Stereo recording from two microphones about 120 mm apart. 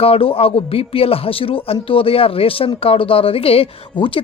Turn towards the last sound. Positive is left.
turn(degrees=45)  # may be behind; listen again after turning